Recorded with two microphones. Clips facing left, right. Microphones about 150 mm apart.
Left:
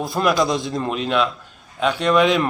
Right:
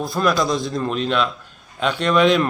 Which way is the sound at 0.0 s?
15° left (ahead or behind).